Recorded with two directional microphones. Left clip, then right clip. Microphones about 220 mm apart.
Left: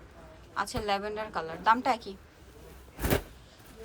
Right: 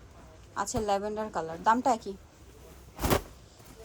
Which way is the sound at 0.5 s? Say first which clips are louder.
Right 1 dB; 20° right (ahead or behind).